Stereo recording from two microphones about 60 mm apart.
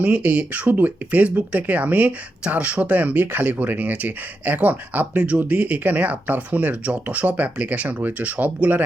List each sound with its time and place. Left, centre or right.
0.0 s speech: right